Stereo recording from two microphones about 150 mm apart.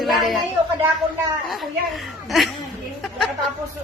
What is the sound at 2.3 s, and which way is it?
Speech, centre (ahead or behind).